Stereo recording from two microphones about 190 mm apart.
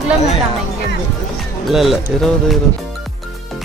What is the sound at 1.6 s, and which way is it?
Speech, centre (ahead or behind).